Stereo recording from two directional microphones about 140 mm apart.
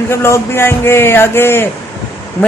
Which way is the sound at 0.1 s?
20° left (ahead or behind).